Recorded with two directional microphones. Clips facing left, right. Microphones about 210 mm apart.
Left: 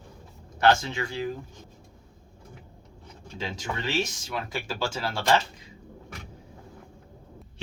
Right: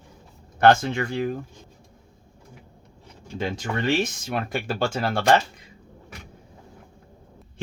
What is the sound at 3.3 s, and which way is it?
Speech, 55° right (ahead or behind).